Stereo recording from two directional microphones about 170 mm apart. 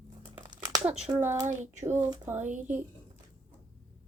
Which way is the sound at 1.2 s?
15° right (ahead or behind).